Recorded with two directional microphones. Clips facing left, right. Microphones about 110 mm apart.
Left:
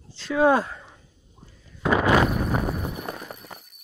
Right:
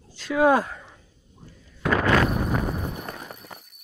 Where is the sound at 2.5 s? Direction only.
10° left (ahead or behind).